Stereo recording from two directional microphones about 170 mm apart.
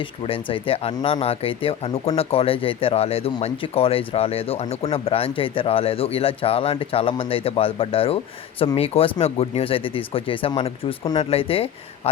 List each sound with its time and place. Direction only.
0.0 s speech: 30° left (ahead or behind)